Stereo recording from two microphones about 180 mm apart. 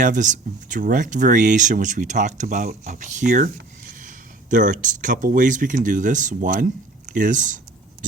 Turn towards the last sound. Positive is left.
turn(degrees=-45)  # may be behind; listen again after turning